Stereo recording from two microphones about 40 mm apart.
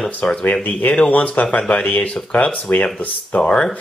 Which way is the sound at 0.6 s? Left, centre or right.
Left.